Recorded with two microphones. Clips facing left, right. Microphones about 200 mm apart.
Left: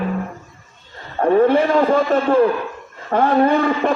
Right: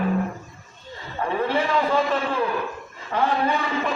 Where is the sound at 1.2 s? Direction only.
50° left (ahead or behind).